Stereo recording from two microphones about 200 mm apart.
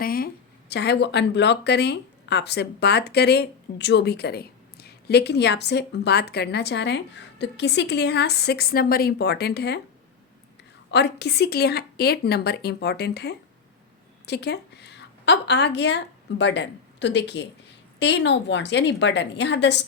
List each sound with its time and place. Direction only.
0.0 s a sound: 45° left (ahead or behind)
0.7 s speech: 55° left (ahead or behind)
10.9 s a woman's voice: 55° left (ahead or behind)